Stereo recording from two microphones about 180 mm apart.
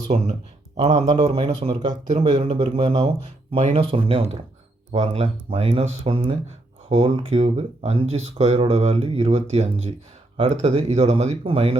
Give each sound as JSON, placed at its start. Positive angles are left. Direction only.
{"t": 0.1, "sound": "speech", "side_deg": -40}